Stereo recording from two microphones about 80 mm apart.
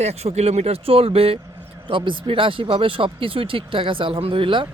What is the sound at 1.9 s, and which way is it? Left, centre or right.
Speech, right.